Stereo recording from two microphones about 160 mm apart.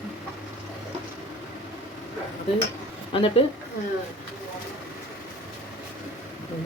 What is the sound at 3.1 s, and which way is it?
Speech, 35° left (ahead or behind).